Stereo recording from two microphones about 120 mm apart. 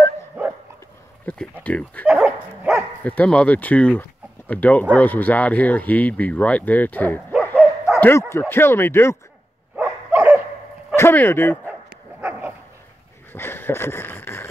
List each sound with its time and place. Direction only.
0.4 s dog: 15° right (ahead or behind)
1.6 s speech: 10° left (ahead or behind)
2.0 s dog: 5° right (ahead or behind)
3.0 s speech: 15° left (ahead or behind)
7.5 s bow-wow: 10° right (ahead or behind)
8.0 s speech: 20° left (ahead or behind)
9.8 s dog: 10° right (ahead or behind)
11.0 s speech: 20° left (ahead or behind)
12.2 s dog: 15° right (ahead or behind)
13.3 s a sound: 20° left (ahead or behind)